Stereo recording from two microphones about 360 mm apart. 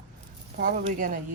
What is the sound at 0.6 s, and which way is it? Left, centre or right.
Speech, right.